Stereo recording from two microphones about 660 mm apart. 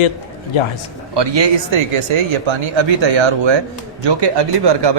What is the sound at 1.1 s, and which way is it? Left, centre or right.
Speech, right.